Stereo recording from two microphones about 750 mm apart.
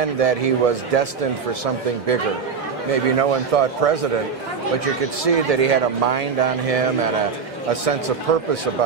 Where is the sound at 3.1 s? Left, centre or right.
Right.